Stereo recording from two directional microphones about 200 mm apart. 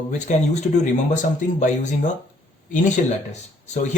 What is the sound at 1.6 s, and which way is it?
Speech, 40° left (ahead or behind).